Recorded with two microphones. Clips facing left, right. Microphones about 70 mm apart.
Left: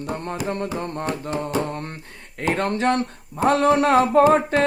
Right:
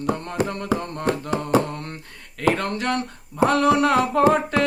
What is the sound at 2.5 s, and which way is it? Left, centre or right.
Speech, left.